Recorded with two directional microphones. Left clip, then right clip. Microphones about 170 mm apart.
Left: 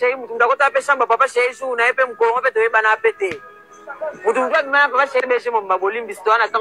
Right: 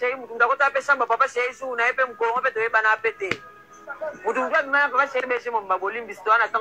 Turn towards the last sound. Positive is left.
turn(degrees=30)  # may be behind; listen again after turning